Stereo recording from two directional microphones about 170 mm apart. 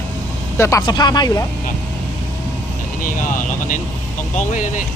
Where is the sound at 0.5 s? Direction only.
15° left (ahead or behind).